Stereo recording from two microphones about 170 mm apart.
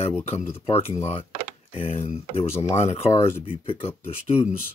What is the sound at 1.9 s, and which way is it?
Speech, 35° left (ahead or behind).